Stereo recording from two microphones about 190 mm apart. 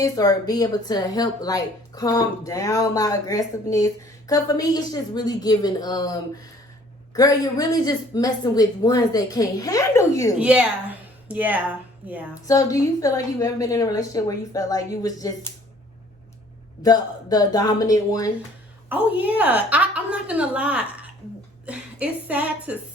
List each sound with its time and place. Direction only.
0.0 s speech: 20° left (ahead or behind)
10.4 s speech: 5° right (ahead or behind)
12.3 s a woman's voice: 15° left (ahead or behind)
16.8 s speech: 20° left (ahead or behind)
18.9 s a woman's voice: 10° right (ahead or behind)